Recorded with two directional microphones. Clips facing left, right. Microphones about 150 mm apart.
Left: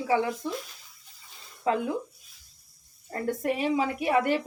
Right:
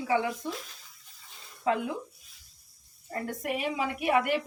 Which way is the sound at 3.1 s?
30° left (ahead or behind).